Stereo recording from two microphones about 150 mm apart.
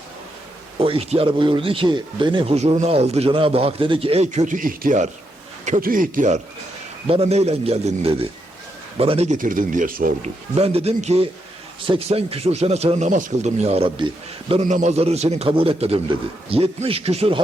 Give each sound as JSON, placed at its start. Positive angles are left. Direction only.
{"t": 0.8, "sound": "speech", "side_deg": -40}
{"t": 2.6, "sound": "speech", "side_deg": -45}
{"t": 7.1, "sound": "speech", "side_deg": -40}
{"t": 10.6, "sound": "speech", "side_deg": -40}
{"t": 14.7, "sound": "speech", "side_deg": -50}